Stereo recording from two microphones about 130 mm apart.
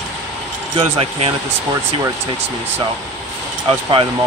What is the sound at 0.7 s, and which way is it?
Speech, 45° right (ahead or behind).